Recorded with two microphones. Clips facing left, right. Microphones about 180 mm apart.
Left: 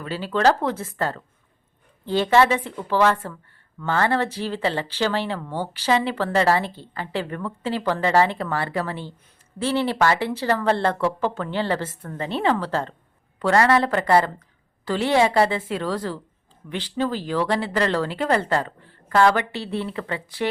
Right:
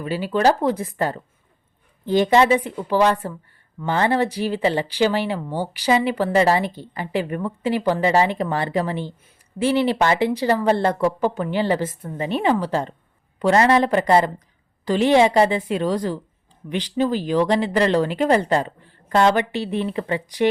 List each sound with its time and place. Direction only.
0.0 s speech: 15° right (ahead or behind)